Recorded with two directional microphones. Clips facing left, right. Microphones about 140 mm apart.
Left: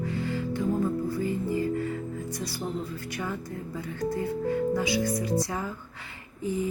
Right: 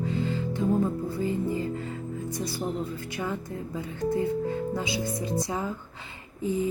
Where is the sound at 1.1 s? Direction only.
20° right (ahead or behind).